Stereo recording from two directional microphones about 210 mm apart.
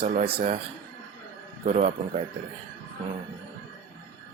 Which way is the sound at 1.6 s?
30° right (ahead or behind).